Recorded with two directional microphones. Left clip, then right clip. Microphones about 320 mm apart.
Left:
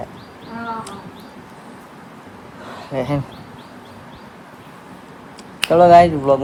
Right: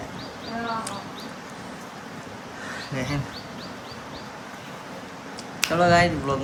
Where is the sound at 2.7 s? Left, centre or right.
Centre.